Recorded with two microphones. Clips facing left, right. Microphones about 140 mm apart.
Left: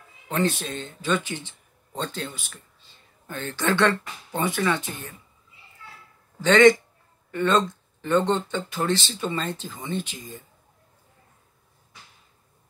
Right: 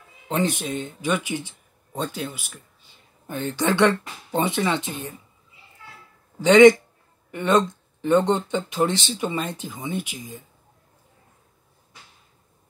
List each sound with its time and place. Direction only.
0.3 s speech: 15° right (ahead or behind)
6.4 s speech: 15° right (ahead or behind)